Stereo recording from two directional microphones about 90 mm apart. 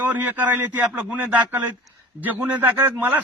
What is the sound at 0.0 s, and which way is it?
A man's voice, 20° right (ahead or behind).